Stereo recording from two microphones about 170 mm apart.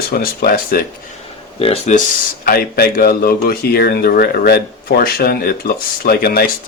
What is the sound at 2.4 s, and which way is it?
Speech, 65° left (ahead or behind).